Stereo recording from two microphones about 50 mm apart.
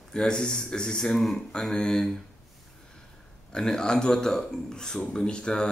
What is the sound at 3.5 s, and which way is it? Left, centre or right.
A man's voice, centre.